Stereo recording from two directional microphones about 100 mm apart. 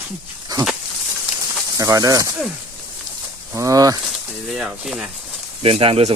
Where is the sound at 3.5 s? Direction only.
30° right (ahead or behind).